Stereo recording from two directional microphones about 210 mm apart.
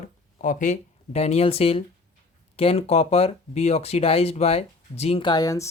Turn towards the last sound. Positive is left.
turn(degrees=15)  # may be behind; listen again after turning